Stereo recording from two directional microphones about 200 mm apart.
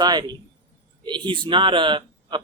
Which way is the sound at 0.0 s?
20° right (ahead or behind).